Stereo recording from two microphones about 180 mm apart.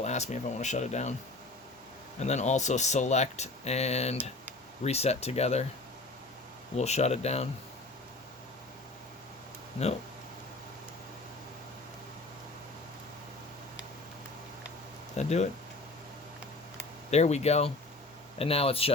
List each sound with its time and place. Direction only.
0.0 s speech: 40° left (ahead or behind)
2.1 s speech: 40° left (ahead or behind)
6.7 s speech: 35° left (ahead or behind)
15.1 s speech: 40° left (ahead or behind)
17.1 s speech: 40° left (ahead or behind)